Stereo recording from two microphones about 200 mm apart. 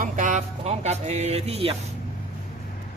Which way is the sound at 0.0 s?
40° right (ahead or behind).